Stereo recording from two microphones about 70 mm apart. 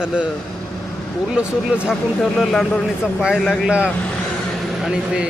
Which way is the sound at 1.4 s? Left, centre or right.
Centre.